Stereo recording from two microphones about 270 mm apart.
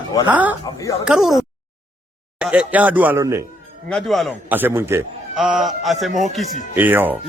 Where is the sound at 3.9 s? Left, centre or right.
Centre.